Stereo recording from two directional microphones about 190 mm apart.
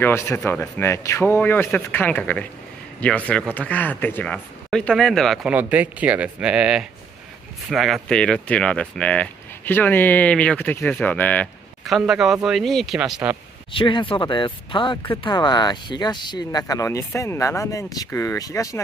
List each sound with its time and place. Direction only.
0.0 s speech: 10° left (ahead or behind); by 13.4 s 5° right (ahead or behind)
13.7 s speech: 25° left (ahead or behind)